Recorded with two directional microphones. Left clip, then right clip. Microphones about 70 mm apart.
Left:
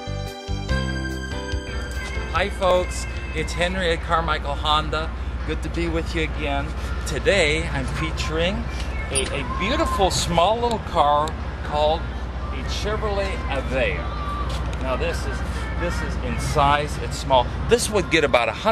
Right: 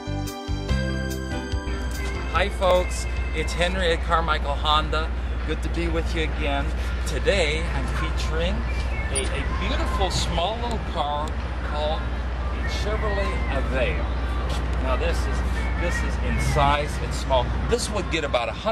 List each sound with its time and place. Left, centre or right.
2.3 s speech: centre
9.1 s speech: left
13.1 s speech: centre
16.5 s speech: centre
17.7 s speech: left